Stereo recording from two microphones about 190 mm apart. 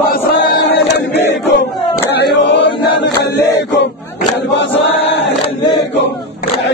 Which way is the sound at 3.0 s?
60° left (ahead or behind).